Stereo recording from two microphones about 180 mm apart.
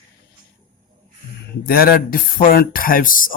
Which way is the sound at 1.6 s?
55° left (ahead or behind).